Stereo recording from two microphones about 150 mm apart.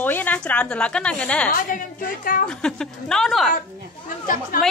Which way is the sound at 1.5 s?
70° left (ahead or behind).